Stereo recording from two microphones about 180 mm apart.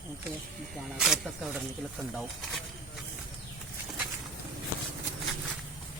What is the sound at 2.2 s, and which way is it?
Speech, centre (ahead or behind).